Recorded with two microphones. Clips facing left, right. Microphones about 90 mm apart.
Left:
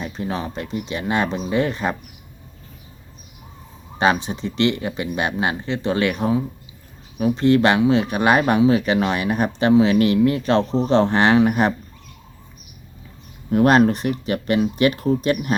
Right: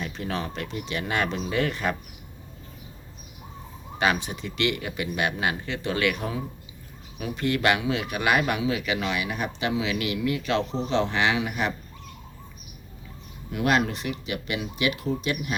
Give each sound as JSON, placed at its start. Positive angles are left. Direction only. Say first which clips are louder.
{"t": 0.0, "sound": "speech", "louder": "left 4 dB", "side_deg": 25}
{"t": 3.9, "sound": "speech", "louder": "left 6 dB", "side_deg": 30}
{"t": 13.5, "sound": "speech", "louder": "left 9 dB", "side_deg": 40}